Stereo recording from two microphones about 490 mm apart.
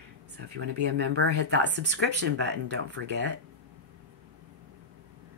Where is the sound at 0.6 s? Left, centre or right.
Centre.